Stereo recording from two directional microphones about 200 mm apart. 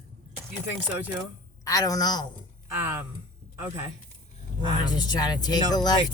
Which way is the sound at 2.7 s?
15° right (ahead or behind).